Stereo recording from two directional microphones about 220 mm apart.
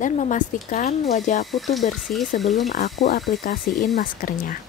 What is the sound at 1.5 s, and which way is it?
Speech, centre (ahead or behind).